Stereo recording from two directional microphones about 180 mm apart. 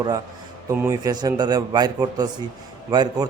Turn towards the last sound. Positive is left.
turn(degrees=-20)  # may be behind; listen again after turning